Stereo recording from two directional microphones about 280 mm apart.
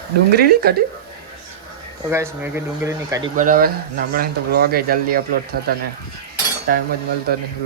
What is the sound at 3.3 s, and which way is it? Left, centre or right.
Speech, right.